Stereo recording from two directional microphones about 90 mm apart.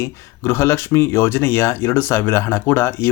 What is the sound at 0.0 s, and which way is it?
Speech, 30° left (ahead or behind).